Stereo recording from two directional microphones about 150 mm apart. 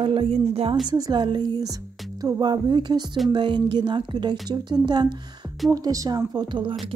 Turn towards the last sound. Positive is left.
turn(degrees=-30)  # may be behind; listen again after turning